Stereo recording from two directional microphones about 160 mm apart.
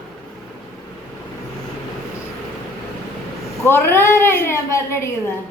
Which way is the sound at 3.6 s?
15° left (ahead or behind).